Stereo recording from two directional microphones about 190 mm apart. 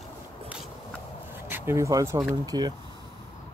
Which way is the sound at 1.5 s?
10° right (ahead or behind).